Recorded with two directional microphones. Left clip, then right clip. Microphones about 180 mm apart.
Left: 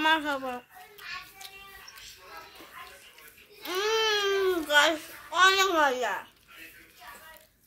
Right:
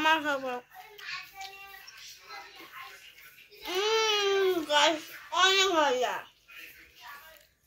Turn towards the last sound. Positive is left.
turn(degrees=10)  # may be behind; listen again after turning